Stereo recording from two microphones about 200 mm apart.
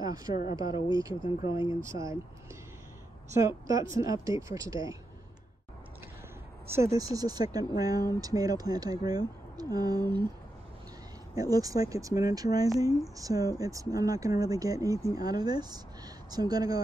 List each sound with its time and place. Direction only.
0.0 s a woman's voice: 20° right (ahead or behind)
1.4 s speech: 25° left (ahead or behind)
1.9 s speech: 15° right (ahead or behind)
3.3 s speech: 15° right (ahead or behind)
6.7 s speech: 15° right (ahead or behind)
11.3 s speech: 15° right (ahead or behind)